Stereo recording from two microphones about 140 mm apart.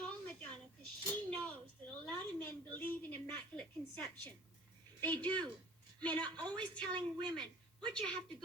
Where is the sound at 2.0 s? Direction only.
10° left (ahead or behind).